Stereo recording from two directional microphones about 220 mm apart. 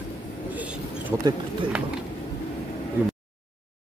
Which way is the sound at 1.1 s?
15° right (ahead or behind).